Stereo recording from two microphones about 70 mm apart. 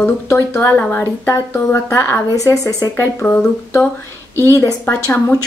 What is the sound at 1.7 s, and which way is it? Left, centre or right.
Speech, left.